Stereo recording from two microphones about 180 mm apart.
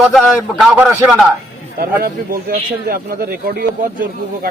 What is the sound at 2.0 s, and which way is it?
Speech, 55° right (ahead or behind).